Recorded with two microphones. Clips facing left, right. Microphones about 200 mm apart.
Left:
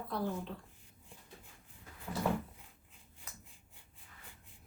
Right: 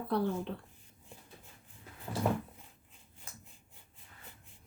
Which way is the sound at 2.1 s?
25° right (ahead or behind).